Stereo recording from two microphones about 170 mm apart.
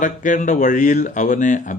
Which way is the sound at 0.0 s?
50° left (ahead or behind).